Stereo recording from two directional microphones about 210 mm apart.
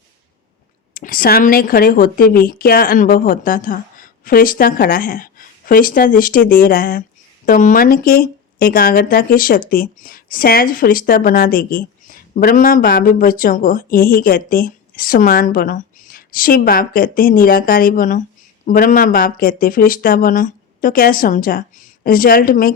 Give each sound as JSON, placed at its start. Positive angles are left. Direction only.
{"t": 0.9, "sound": "speech", "side_deg": 45}